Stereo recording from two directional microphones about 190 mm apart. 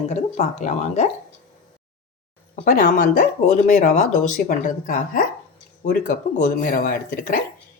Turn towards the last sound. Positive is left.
turn(degrees=50)  # may be behind; listen again after turning